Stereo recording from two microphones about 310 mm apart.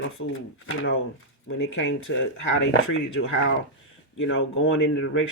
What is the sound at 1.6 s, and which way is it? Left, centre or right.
Speech, left.